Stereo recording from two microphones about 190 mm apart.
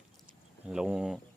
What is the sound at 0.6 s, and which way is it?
Speech, 5° right (ahead or behind).